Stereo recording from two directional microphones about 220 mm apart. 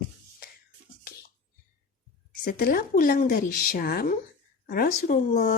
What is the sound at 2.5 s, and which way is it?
Speech, 45° left (ahead or behind).